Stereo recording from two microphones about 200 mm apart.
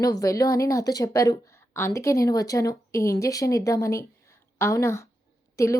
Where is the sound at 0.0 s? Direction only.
15° left (ahead or behind).